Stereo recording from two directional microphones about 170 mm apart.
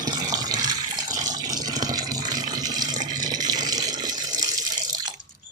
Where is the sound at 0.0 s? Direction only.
20° right (ahead or behind).